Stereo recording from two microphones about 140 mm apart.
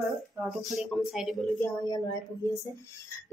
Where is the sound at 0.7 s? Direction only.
Centre (ahead or behind).